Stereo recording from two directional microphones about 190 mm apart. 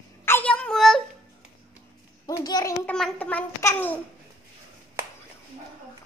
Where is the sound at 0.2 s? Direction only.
10° left (ahead or behind).